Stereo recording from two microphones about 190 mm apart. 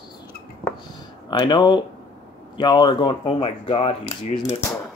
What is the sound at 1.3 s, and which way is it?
Speech, 25° left (ahead or behind).